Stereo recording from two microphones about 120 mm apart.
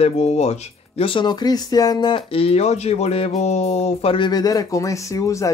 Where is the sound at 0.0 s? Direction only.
65° left (ahead or behind).